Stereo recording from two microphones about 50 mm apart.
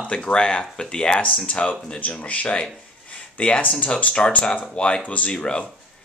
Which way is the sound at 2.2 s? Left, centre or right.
Left.